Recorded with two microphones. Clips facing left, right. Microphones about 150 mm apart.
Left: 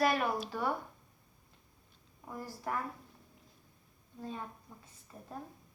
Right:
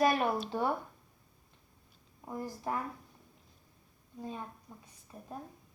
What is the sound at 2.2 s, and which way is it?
Speech, 20° right (ahead or behind).